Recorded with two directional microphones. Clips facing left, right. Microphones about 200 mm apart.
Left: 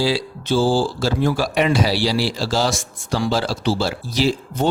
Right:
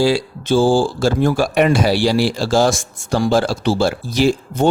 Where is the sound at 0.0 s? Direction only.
50° right (ahead or behind).